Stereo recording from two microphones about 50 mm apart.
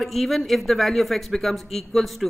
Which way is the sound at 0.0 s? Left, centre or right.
Centre.